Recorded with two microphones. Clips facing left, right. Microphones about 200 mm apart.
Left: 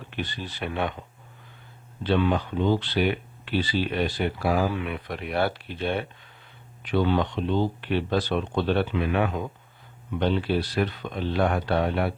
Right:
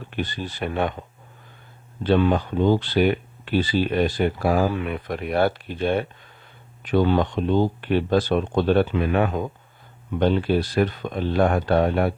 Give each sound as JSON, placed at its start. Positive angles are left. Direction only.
{"t": 0.1, "sound": "speech", "side_deg": -45}
{"t": 2.0, "sound": "speech", "side_deg": -45}